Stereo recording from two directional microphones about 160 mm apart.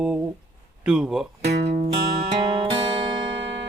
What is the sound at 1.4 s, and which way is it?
Speech, 90° right.